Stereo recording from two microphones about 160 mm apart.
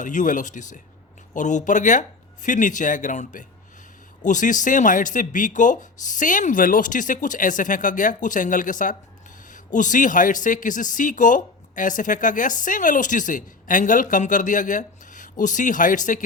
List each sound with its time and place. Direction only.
0.0 s speech: 50° left (ahead or behind)